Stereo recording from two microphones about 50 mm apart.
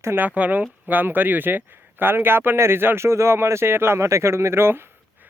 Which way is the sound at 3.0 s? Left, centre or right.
Right.